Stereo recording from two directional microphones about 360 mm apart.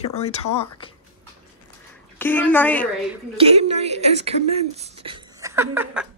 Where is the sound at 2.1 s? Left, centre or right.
Centre.